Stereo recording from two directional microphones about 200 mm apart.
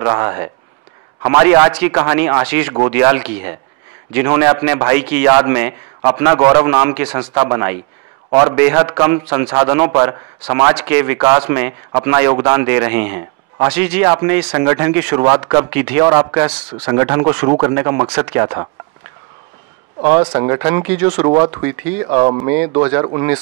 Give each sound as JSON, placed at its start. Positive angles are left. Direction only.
{"t": 0.0, "sound": "speech", "side_deg": -15}
{"t": 10.7, "sound": "speech", "side_deg": -10}
{"t": 15.7, "sound": "speech", "side_deg": -10}
{"t": 20.0, "sound": "speech", "side_deg": -10}